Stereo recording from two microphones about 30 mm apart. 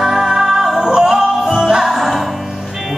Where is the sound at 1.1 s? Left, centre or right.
Centre.